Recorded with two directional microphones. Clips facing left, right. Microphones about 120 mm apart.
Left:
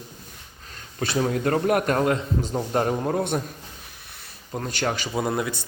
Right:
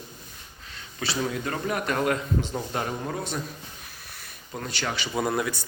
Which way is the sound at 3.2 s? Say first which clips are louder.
Left 7 dB; 55° left (ahead or behind).